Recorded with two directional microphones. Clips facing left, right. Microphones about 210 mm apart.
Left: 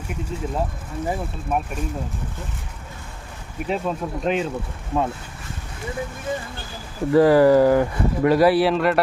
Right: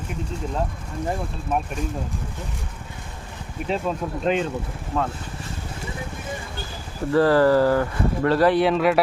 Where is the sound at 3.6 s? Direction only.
5° left (ahead or behind).